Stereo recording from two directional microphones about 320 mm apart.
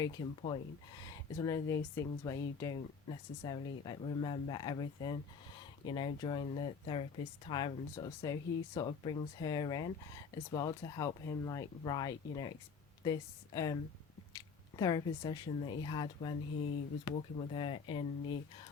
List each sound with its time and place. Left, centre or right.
0.0 s speech: centre